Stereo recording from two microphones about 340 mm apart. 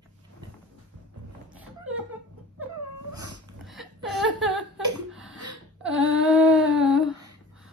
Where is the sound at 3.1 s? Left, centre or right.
Right.